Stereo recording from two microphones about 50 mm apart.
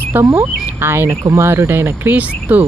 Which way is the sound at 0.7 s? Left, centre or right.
Right.